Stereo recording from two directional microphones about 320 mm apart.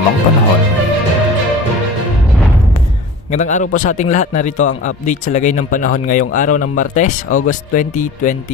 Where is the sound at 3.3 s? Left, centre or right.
Left.